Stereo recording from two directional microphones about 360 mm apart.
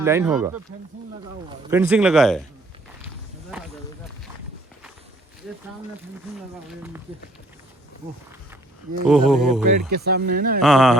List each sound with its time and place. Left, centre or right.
0.0 s a man's voice: centre
6.7 s a man's voice: centre
9.0 s a man's voice: centre
9.9 s speech: right
10.6 s a man's voice: centre